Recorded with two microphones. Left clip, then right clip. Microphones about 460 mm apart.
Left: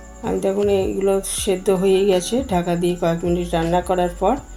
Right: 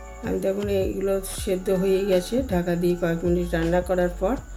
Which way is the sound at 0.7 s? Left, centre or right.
Right.